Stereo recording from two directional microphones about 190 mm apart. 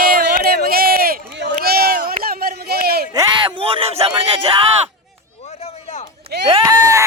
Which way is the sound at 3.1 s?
25° right (ahead or behind).